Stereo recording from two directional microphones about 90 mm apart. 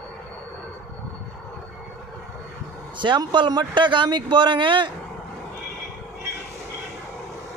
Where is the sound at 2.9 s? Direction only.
60° right (ahead or behind).